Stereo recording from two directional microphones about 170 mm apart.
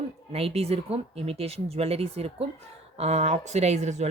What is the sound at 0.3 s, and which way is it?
Speech, 35° right (ahead or behind).